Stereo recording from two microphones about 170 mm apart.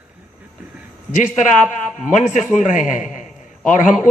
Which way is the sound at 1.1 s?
45° left (ahead or behind).